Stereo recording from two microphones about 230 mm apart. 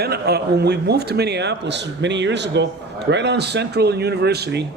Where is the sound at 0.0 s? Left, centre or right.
Right.